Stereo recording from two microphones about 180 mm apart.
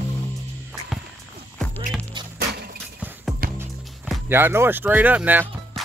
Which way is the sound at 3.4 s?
55° right (ahead or behind).